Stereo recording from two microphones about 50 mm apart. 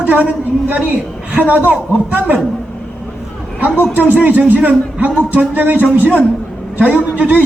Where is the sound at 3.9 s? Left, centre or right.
Right.